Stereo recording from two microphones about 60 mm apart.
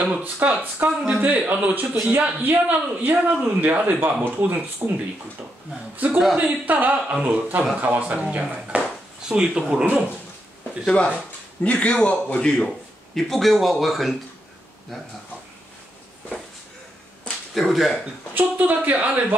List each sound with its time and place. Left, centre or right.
0.0 s speech: right
5.9 s speech: right
10.9 s a man's voice: left
12.6 s speech: centre
17.6 s speech: centre
18.3 s speech: right